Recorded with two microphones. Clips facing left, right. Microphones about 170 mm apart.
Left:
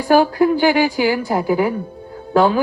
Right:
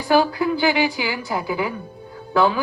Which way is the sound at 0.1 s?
40° left (ahead or behind).